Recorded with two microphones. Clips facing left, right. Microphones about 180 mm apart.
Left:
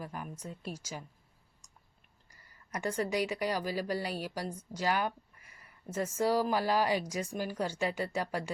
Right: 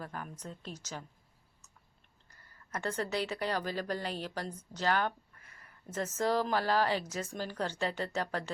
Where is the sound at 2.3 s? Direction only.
10° left (ahead or behind).